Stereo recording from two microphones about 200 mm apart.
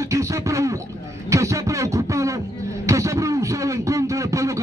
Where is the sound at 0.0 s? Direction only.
15° right (ahead or behind).